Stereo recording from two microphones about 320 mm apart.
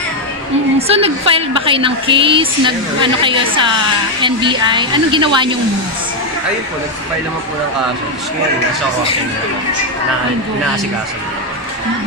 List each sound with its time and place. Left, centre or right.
0.7 s a woman's voice: centre